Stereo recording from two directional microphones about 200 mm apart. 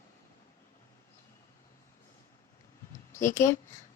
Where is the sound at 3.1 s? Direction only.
15° left (ahead or behind).